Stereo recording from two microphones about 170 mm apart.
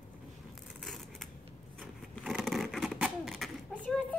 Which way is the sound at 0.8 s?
Centre (ahead or behind).